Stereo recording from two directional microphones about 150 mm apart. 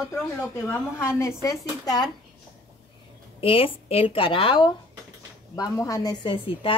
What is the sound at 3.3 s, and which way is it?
A woman's voice, 40° left (ahead or behind).